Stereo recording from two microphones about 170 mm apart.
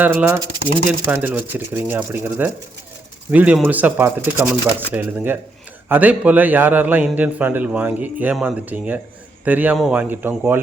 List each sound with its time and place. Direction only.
0.0 s a man's voice: 10° right (ahead or behind)